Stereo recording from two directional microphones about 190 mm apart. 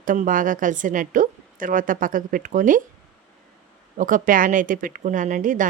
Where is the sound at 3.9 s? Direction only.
45° right (ahead or behind).